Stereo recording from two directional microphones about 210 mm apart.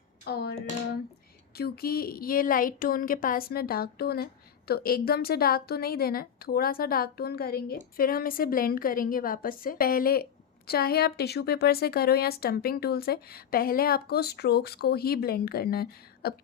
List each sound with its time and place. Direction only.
0.3 s tap: 50° left (ahead or behind)
1.5 s a woman's voice: 45° left (ahead or behind)